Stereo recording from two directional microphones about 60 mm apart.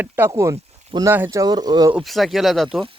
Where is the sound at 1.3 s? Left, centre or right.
Right.